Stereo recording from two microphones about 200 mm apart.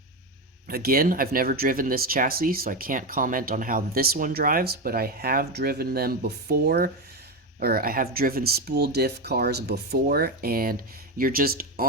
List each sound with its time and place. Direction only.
0.7 s speech: 50° right (ahead or behind)